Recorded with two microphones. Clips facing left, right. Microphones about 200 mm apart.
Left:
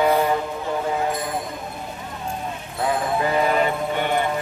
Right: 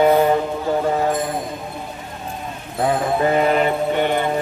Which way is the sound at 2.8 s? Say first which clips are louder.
Right 4 dB; 35° right (ahead or behind).